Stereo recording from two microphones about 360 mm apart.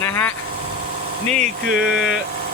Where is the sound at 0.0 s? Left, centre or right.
Centre.